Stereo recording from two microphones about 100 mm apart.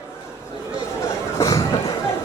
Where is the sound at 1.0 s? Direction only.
35° left (ahead or behind).